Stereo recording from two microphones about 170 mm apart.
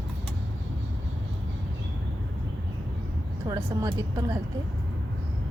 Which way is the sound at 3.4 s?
20° right (ahead or behind).